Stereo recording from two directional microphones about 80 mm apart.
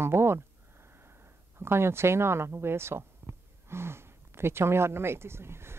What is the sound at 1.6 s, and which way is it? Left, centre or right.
Speech, right.